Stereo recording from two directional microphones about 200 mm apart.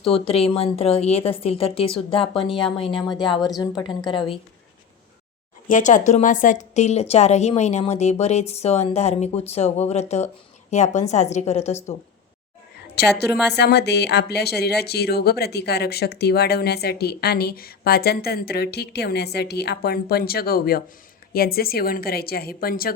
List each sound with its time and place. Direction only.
0.0 s a woman's voice: 30° left (ahead or behind)
3.3 s a woman's voice: centre (ahead or behind)
3.8 s a woman's voice: 20° left (ahead or behind)
5.6 s a woman's voice: 40° left (ahead or behind)
13.0 s a woman's voice: 55° left (ahead or behind)